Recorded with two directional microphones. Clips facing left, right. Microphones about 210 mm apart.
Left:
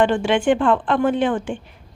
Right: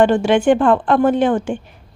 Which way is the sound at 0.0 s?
40° right (ahead or behind).